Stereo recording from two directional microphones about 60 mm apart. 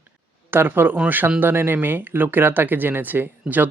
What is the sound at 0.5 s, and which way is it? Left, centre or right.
Speech, right.